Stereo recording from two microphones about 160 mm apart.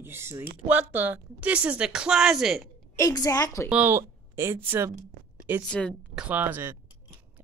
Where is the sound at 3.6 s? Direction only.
10° right (ahead or behind).